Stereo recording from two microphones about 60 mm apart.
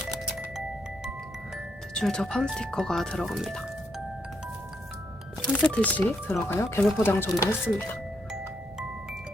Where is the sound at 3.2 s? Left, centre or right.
Centre.